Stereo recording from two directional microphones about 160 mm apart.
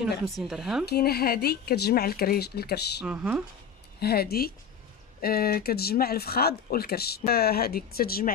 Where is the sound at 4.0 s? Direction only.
75° left (ahead or behind).